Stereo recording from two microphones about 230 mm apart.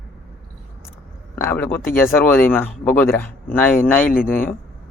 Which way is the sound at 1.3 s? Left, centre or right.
Centre.